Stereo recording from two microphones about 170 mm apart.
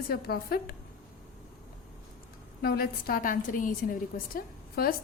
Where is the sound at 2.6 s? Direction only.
60° left (ahead or behind).